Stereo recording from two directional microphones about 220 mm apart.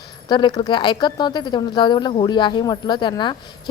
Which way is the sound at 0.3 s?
20° left (ahead or behind).